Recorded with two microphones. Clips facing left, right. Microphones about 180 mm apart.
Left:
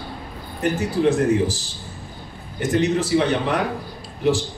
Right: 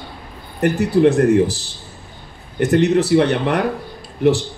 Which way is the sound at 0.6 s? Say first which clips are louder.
Right 6 dB; 60° right (ahead or behind).